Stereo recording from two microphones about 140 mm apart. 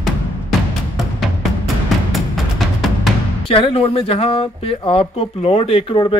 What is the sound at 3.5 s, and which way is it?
Speech, 40° left (ahead or behind).